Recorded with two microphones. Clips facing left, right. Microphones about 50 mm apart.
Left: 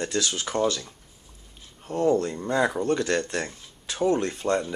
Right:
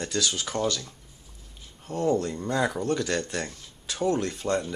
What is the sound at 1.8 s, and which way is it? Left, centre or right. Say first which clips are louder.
Speech: left 3 dB; centre.